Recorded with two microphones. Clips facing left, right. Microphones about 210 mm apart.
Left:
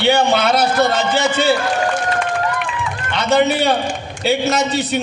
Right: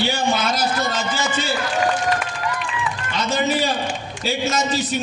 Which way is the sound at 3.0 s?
65° left (ahead or behind).